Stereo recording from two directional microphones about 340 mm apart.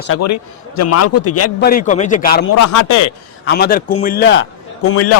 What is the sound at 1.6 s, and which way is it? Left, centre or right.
Speech, left.